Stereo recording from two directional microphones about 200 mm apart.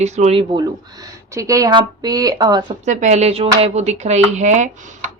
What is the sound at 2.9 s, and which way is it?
Speech, 35° right (ahead or behind).